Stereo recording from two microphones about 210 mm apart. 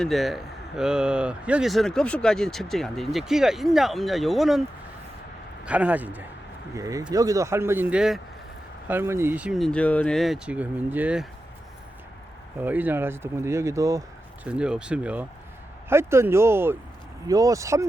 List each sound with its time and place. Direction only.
0.0 s speech: centre (ahead or behind)
5.6 s speech: 5° right (ahead or behind)
12.6 s speech: 10° right (ahead or behind)
14.4 s speech: 5° right (ahead or behind)